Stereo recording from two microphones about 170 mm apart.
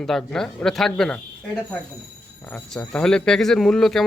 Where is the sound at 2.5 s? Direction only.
5° left (ahead or behind).